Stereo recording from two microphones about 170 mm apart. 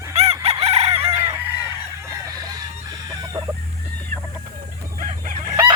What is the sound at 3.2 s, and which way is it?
Chicken, 20° right (ahead or behind).